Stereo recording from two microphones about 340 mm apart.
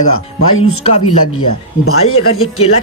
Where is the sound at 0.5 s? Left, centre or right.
Left.